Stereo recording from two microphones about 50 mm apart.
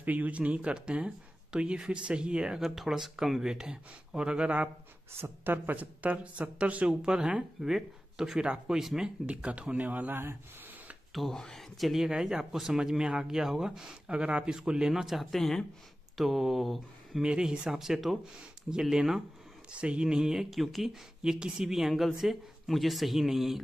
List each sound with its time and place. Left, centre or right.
0.0 s speech: right
2.5 s speech: centre; by 4.6 s right
5.2 s speech: right
7.0 s speech: centre
9.3 s speech: right
11.1 s speech: centre
11.8 s speech: centre
17.2 s speech: centre
19.7 s speech: right
20.4 s speech: centre
21.2 s speech: centre